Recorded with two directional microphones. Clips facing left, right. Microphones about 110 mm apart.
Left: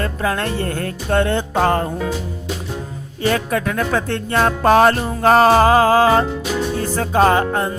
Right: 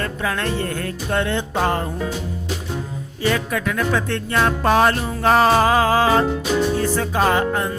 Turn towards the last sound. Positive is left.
turn(degrees=40)  # may be behind; listen again after turning